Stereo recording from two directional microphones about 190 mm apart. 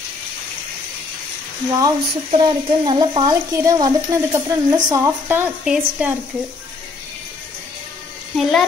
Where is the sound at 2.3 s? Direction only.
25° right (ahead or behind); by 6.1 s 5° right (ahead or behind).